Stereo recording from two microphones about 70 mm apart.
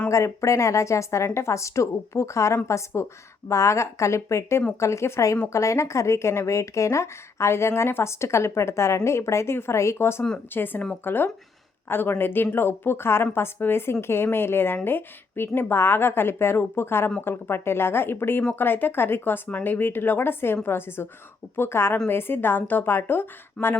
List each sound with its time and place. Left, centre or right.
0.1 s a woman's voice: left